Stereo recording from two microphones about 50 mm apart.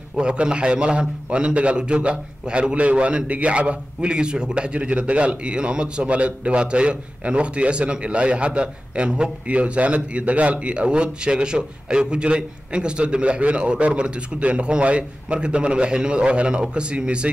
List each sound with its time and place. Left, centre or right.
0.1 s a man's voice: centre